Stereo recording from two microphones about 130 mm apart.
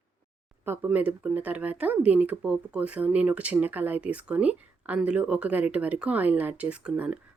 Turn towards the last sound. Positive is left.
turn(degrees=-5)  # may be behind; listen again after turning